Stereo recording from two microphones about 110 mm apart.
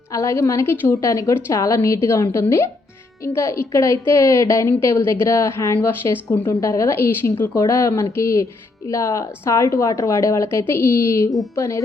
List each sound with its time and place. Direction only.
0.1 s a woman's voice: 30° left (ahead or behind)